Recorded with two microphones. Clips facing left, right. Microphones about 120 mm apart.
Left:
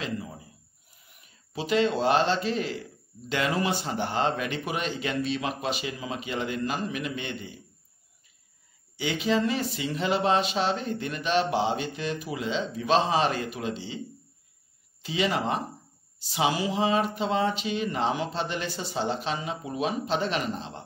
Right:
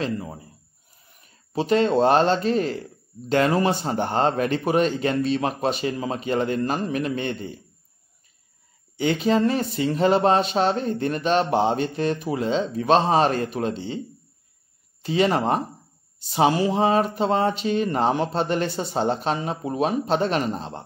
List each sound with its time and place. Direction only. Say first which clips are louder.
0.0 s a man's voice: right 6 dB; 45° right (ahead or behind)
8.9 s speech: right 5 dB; 40° right (ahead or behind)
15.0 s speech: right 6 dB; 45° right (ahead or behind)